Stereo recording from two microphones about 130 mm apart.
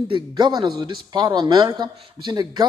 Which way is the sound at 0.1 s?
35° right (ahead or behind).